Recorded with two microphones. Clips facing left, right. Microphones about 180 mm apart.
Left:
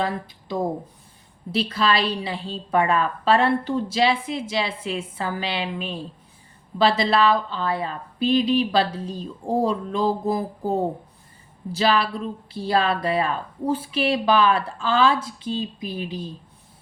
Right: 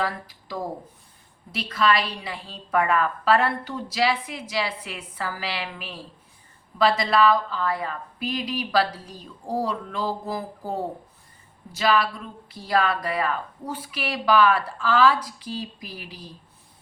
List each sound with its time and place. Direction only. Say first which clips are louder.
0.0 s a woman's voice: left 3 dB; 25° left (ahead or behind)